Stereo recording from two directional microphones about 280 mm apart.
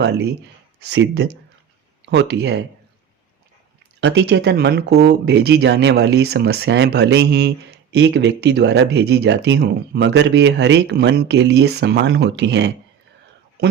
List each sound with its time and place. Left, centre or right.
0.8 s speech: right
4.0 s speech: right